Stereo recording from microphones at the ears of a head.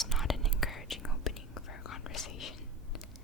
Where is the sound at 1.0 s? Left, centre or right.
Left.